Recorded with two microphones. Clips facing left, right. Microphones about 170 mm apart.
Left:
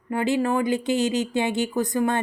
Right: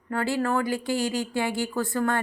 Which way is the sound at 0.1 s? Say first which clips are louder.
Left 3 dB; 15° left (ahead or behind).